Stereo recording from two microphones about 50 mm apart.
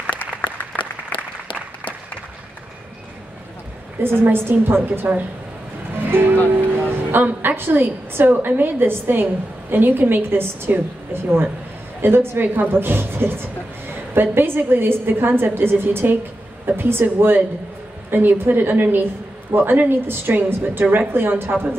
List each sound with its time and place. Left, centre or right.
0.0 s applause: left
4.0 s a woman's voice: right
12.0 s a woman's voice: right